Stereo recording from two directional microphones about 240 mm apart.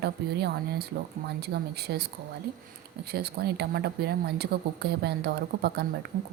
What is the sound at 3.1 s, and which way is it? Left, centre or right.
Speech, right.